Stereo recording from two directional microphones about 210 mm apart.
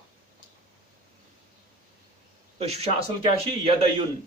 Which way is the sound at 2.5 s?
30° right (ahead or behind).